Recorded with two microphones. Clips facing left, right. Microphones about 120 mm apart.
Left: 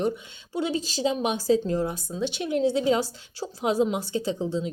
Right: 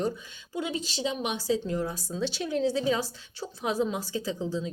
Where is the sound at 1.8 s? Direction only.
20° left (ahead or behind).